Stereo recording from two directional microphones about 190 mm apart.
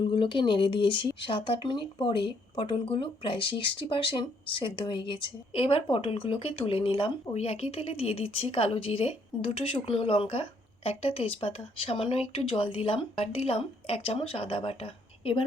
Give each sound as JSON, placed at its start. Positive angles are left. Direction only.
{"t": 0.0, "sound": "speech", "side_deg": 25}